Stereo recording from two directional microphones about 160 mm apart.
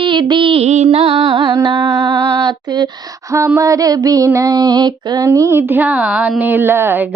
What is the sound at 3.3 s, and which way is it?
Female singing, 20° right (ahead or behind).